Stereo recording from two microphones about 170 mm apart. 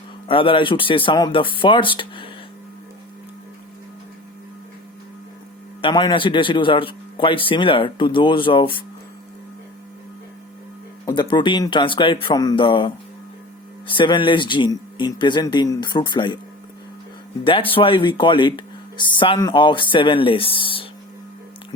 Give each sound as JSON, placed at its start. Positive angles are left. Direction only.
{"t": 0.3, "sound": "speech", "side_deg": 30}
{"t": 5.8, "sound": "speech", "side_deg": 25}
{"t": 11.0, "sound": "speech", "side_deg": 25}
{"t": 17.4, "sound": "speech", "side_deg": 30}